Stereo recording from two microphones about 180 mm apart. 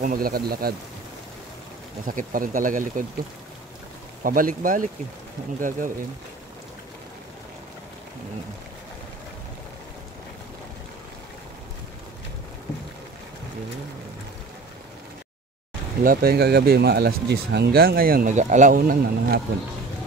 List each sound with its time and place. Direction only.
0.0 s speech: 55° right (ahead or behind)
2.0 s speech: 50° right (ahead or behind)
4.2 s speech: 50° right (ahead or behind)
16.0 s speech: 55° right (ahead or behind)